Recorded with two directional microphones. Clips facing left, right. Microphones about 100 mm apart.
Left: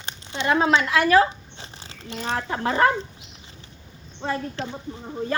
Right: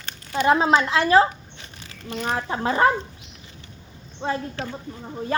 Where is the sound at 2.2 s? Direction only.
30° right (ahead or behind).